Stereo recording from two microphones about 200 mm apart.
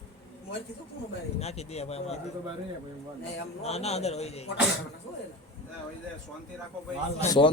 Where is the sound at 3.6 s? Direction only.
30° left (ahead or behind).